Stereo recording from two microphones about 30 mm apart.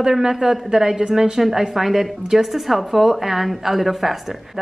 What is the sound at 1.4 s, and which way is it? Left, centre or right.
A woman's voice, centre.